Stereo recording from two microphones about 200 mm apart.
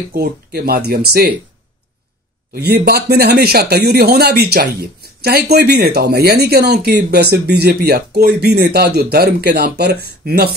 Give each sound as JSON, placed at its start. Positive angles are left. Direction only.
{"t": 0.1, "sound": "speech", "side_deg": -50}
{"t": 2.5, "sound": "speech", "side_deg": -55}